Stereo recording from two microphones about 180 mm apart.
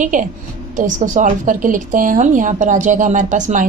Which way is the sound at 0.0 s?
45° right (ahead or behind).